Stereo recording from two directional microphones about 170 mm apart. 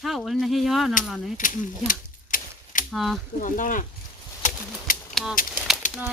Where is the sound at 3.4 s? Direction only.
50° left (ahead or behind).